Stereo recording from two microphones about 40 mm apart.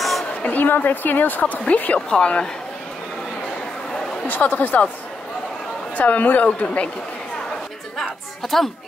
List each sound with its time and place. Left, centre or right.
0.5 s speech: left
1.4 s a woman's voice: left
2.0 s a woman's voice: centre
2.2 s speech: left
4.3 s speech: left
5.9 s a woman's voice: left
8.0 s chatter: centre